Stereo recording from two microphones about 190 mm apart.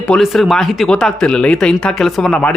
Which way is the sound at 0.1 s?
Centre (ahead or behind).